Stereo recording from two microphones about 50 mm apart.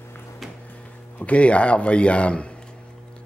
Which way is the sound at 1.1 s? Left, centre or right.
Left.